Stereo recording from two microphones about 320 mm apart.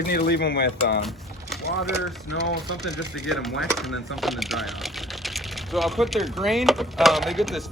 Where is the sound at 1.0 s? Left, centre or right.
Centre.